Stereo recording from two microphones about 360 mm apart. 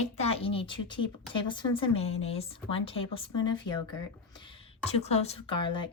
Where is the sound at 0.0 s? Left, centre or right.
Centre.